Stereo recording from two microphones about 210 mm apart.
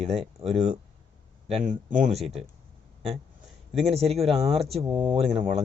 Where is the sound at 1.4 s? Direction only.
35° right (ahead or behind).